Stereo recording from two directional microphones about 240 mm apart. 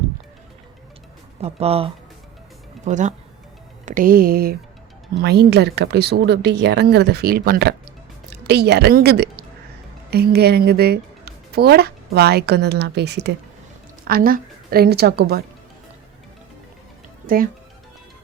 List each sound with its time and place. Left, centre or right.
1.4 s a woman's voice: right
17.2 s speech: right